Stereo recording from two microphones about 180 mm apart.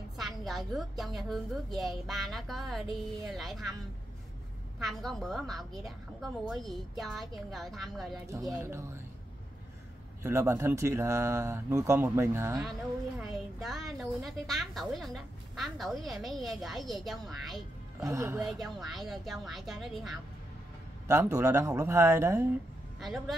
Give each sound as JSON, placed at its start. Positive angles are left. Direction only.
{"t": 0.2, "sound": "a woman's voice", "side_deg": 0}
{"t": 4.7, "sound": "a woman's voice", "side_deg": 0}
{"t": 10.2, "sound": "speech", "side_deg": -15}
{"t": 13.2, "sound": "a woman's voice", "side_deg": 0}
{"t": 18.0, "sound": "speech", "side_deg": -15}
{"t": 18.4, "sound": "a woman's voice", "side_deg": 0}
{"t": 21.1, "sound": "speech", "side_deg": -15}
{"t": 22.9, "sound": "speech", "side_deg": 0}